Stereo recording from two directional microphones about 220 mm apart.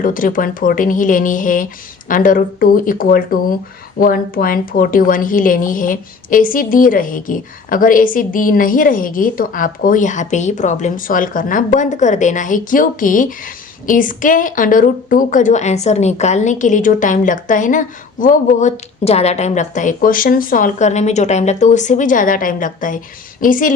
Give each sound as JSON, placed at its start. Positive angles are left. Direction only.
{"t": 0.0, "sound": "a woman's voice", "side_deg": 40}